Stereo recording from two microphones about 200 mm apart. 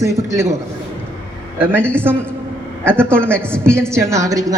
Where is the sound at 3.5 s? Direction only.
5° left (ahead or behind).